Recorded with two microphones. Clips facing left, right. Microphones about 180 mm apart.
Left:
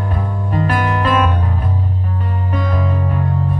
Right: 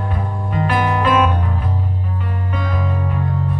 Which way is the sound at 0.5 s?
45° left (ahead or behind).